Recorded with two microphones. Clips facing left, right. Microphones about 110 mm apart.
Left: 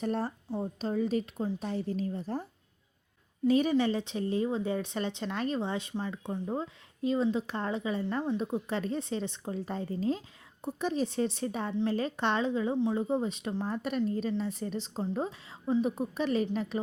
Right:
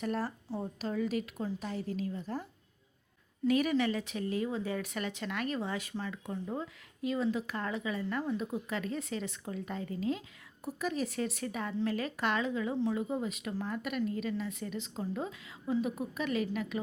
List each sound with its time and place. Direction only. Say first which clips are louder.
0.0 s speech: left 3 dB; 30° left (ahead or behind)